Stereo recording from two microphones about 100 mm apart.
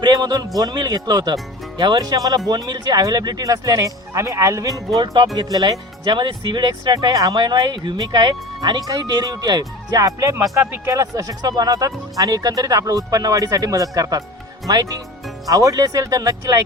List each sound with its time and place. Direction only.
0.0 s music: 45° right (ahead or behind)
0.6 s speech: 45° right (ahead or behind)